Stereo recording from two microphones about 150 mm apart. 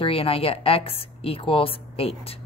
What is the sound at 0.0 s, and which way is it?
A woman's voice, 40° left (ahead or behind).